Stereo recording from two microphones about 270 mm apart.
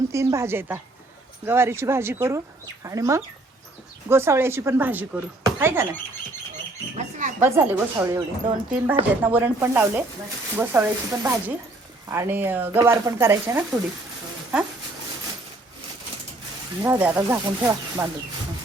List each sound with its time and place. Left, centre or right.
0.1 s speech: centre
6.9 s speech: right
7.4 s speech: centre
16.8 s speech: centre